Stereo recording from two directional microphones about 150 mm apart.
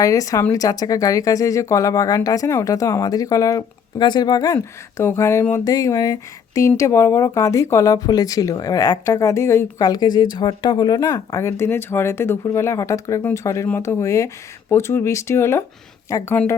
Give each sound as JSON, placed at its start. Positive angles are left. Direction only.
{"t": 0.0, "sound": "speech", "side_deg": 25}